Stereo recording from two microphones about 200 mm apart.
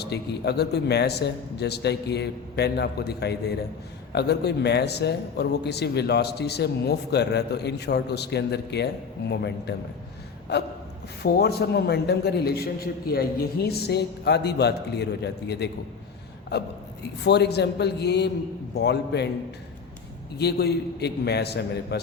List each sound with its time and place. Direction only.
0.0 s a man's voice: 55° left (ahead or behind)
20.4 s a man's voice: 55° left (ahead or behind)